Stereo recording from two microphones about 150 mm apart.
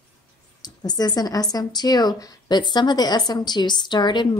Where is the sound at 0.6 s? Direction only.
25° left (ahead or behind).